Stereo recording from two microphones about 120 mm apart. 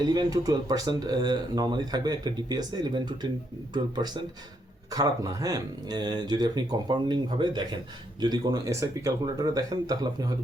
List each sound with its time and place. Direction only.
0.0 s speech: 35° right (ahead or behind)